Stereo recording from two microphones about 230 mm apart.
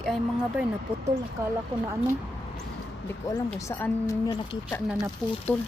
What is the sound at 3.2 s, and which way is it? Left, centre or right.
A woman's voice, centre.